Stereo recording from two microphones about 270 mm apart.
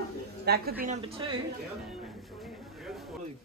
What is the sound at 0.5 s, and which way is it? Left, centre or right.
Speech, right.